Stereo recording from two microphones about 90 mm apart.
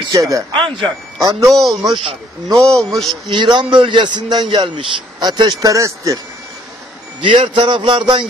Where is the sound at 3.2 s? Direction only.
60° right (ahead or behind); by 6.1 s 35° right (ahead or behind).